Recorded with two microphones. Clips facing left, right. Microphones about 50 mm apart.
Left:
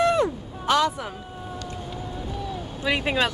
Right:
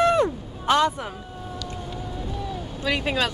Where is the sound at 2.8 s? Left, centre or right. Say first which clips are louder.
Left 1 dB; centre.